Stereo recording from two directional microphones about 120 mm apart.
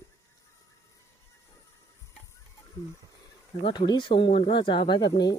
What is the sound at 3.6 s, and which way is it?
Speech, 35° left (ahead or behind).